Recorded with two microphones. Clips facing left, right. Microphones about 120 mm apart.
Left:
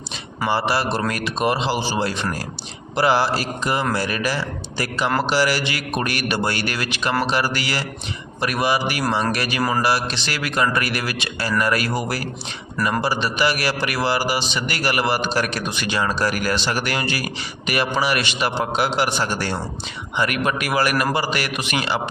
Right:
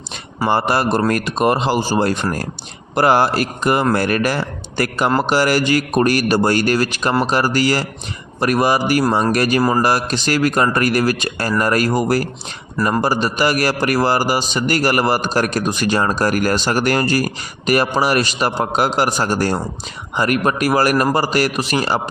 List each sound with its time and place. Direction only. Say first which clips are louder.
0.4 s a man's voice: right 4 dB; 50° right (ahead or behind)